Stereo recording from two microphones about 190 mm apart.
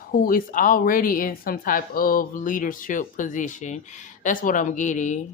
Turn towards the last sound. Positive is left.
turn(degrees=40)  # may be behind; listen again after turning